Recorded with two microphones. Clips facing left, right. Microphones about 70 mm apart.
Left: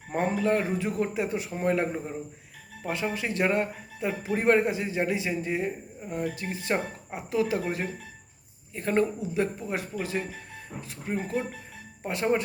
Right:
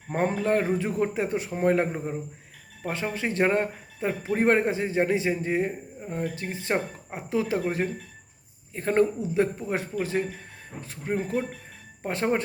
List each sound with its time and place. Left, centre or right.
0.1 s speech: right